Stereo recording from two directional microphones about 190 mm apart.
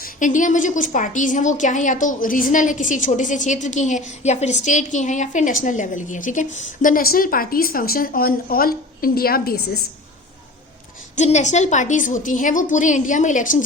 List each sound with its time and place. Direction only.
0.0 s a woman's voice: 45° left (ahead or behind)
11.2 s a woman's voice: 40° left (ahead or behind)